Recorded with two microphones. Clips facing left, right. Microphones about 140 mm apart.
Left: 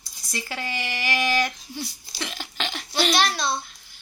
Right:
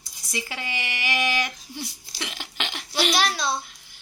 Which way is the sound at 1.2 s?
20° right (ahead or behind).